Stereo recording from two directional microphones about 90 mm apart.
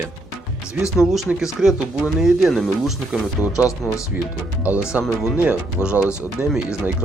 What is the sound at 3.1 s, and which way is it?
Speech, 10° right (ahead or behind).